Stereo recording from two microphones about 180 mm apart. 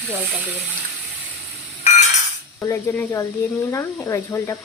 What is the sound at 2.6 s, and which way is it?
Speech, 15° left (ahead or behind).